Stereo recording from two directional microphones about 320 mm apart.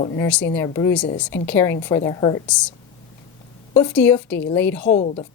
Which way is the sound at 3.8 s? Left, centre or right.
Centre.